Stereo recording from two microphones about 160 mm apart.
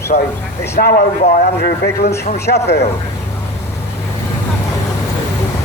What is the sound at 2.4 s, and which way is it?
Speech, 90° left.